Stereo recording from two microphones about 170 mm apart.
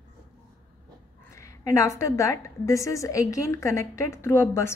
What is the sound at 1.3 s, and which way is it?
A woman's voice, 20° left (ahead or behind).